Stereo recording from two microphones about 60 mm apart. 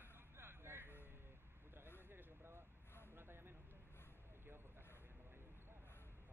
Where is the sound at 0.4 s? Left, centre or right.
Right.